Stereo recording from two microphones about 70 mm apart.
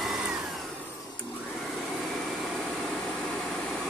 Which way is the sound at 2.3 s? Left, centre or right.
Centre.